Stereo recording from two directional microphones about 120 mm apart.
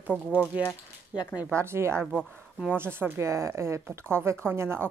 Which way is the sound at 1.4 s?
20° right (ahead or behind).